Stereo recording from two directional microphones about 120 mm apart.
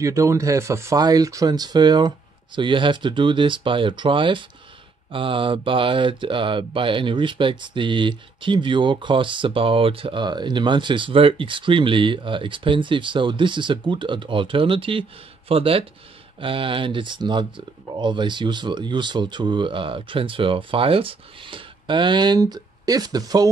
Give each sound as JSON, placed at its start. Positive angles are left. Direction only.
{"t": 0.0, "sound": "speech", "side_deg": -25}
{"t": 5.1, "sound": "mantra", "side_deg": -45}
{"t": 16.3, "sound": "speech", "side_deg": -45}